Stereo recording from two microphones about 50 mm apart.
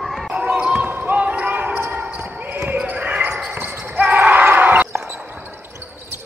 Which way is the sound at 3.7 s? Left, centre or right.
Right.